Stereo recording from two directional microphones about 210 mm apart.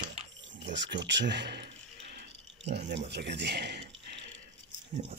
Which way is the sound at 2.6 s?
55° right (ahead or behind).